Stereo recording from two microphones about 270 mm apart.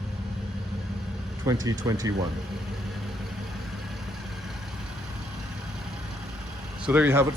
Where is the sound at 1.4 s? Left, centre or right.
Centre.